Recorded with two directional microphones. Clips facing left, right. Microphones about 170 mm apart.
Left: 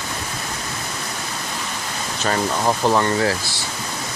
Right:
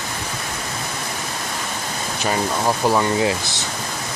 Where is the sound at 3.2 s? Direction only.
20° right (ahead or behind).